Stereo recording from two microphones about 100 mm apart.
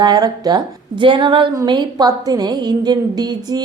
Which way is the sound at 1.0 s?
55° right (ahead or behind).